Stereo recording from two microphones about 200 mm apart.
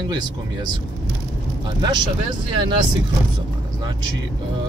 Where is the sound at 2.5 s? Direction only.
25° right (ahead or behind).